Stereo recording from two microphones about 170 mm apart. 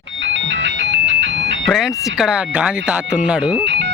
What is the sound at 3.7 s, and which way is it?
Music, 90° right.